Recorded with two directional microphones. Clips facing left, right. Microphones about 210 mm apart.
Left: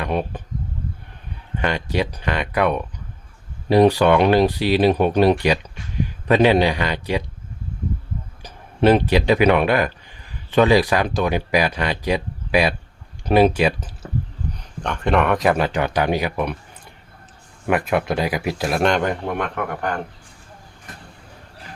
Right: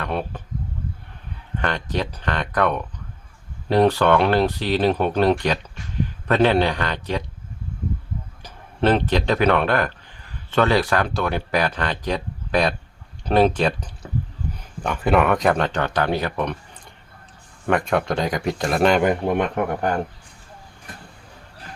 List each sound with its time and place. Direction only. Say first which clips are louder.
0.0 s speech: left 3 dB; 15° left (ahead or behind)
1.6 s a man's voice: left 3 dB; 10° left (ahead or behind)
8.4 s speech: left 4 dB; 10° left (ahead or behind)
17.7 s speech: left 1 dB; 5° left (ahead or behind)
19.5 s speech: right 3 dB; 30° right (ahead or behind)